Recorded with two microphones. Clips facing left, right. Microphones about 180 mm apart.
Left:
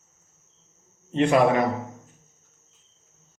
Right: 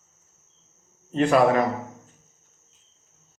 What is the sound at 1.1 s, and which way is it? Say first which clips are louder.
Speech: even; 25° left (ahead or behind).